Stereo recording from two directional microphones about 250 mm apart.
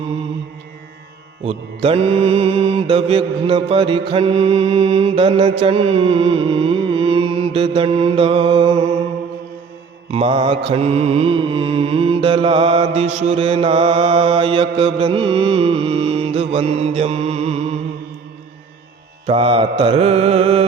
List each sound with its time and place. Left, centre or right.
1.5 s mantra: right
10.1 s mantra: right
19.2 s mantra: right